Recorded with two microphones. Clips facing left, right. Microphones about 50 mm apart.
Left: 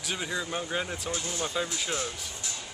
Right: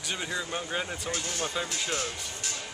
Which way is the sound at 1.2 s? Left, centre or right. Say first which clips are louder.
Even; right.